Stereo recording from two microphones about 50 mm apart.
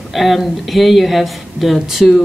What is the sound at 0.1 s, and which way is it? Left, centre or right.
Speech, centre.